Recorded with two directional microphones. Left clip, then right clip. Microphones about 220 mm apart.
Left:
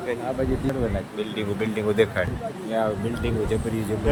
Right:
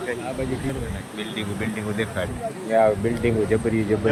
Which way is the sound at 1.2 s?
45° left (ahead or behind).